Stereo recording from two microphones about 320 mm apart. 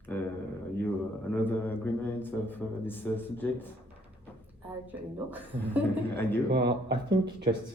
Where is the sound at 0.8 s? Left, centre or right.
Centre.